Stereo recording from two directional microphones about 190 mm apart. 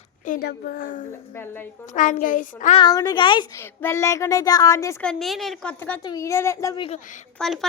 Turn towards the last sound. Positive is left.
turn(degrees=0)  # may be behind; listen again after turning